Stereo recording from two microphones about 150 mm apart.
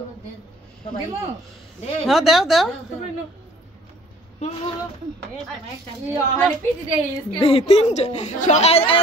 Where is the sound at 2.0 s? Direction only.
Centre (ahead or behind).